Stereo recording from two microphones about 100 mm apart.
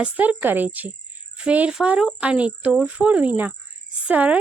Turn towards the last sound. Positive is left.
turn(degrees=-15)  # may be behind; listen again after turning